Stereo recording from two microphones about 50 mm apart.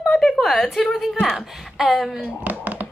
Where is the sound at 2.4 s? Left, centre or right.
Right.